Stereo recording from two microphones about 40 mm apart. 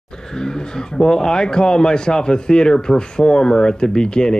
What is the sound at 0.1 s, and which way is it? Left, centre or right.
Speech, centre.